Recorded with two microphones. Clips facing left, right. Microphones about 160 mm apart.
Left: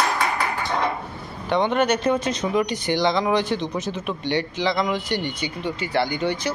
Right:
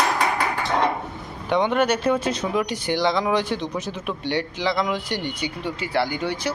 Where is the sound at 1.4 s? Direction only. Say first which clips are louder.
Even; 10° right (ahead or behind).